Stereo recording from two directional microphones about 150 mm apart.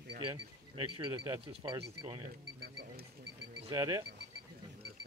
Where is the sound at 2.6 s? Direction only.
90° right.